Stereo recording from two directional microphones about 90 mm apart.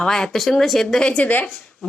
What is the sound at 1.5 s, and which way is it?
Speech, 10° left (ahead or behind).